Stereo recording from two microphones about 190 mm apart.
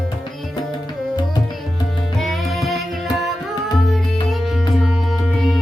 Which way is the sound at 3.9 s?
Centre (ahead or behind).